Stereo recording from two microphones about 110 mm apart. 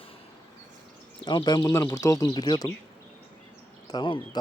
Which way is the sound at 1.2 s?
40° left (ahead or behind).